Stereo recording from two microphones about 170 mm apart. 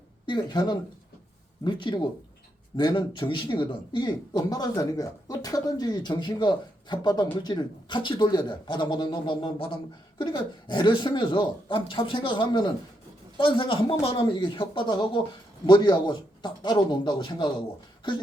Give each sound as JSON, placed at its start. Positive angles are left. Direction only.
{"t": 0.3, "sound": "a man's voice", "side_deg": 25}